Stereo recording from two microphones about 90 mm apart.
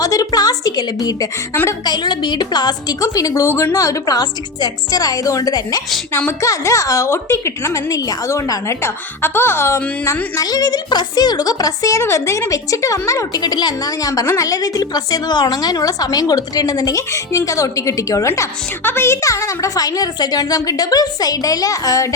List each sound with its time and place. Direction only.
0.0 s a woman's voice: 40° left (ahead or behind)
6.4 s speech: 35° left (ahead or behind)
10.3 s speech: 45° left (ahead or behind)
13.4 s a woman's voice: 50° left (ahead or behind)